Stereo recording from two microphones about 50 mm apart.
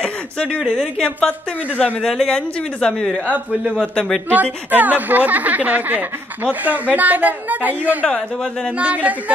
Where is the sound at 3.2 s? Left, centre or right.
Right.